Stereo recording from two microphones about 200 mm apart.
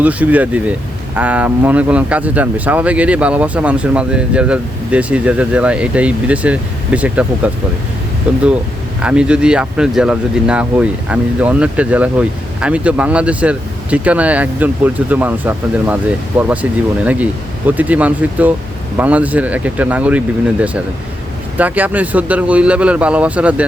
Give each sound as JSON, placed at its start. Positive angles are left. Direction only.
{"t": 0.0, "sound": "speech", "side_deg": -5}